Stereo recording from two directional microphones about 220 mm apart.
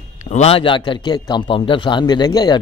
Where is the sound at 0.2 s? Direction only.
30° left (ahead or behind).